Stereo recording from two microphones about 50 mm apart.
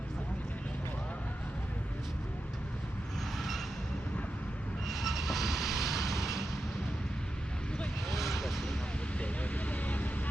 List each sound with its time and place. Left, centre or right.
3.3 s a sound: centre
4.9 s vehicle: centre
5.9 s vehicle: left
8.1 s vehicle: centre
9.1 s vehicle: left